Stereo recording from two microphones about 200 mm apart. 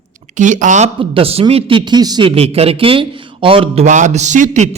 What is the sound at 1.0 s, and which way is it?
A man's voice, 30° right (ahead or behind).